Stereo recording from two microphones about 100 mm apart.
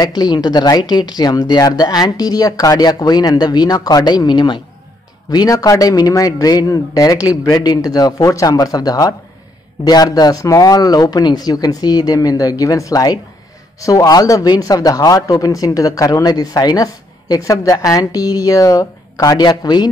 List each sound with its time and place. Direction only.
0.0 s a man's voice: 45° left (ahead or behind)